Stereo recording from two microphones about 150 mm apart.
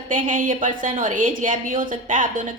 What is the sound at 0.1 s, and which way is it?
A woman's voice, 60° right (ahead or behind).